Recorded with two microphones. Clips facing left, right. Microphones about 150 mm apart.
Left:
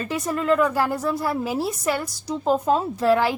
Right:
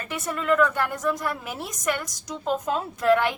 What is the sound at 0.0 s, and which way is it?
A woman's voice, 30° left (ahead or behind).